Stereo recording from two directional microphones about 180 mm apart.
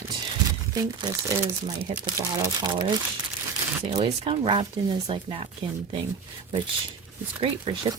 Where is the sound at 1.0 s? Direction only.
20° right (ahead or behind).